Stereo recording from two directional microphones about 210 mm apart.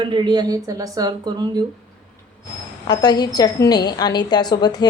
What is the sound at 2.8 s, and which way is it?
A woman's voice, 20° left (ahead or behind).